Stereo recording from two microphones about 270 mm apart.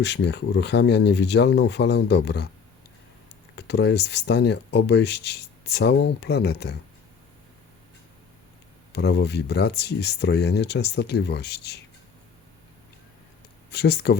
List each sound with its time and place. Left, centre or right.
0.0 s speech: left
3.5 s speech: left
8.9 s speech: left
13.7 s speech: left